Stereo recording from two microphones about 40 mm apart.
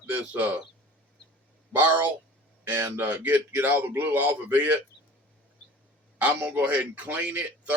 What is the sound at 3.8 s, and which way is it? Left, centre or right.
Speech, right.